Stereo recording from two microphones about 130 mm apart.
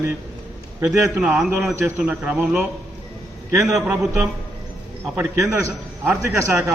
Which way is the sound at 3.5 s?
25° right (ahead or behind).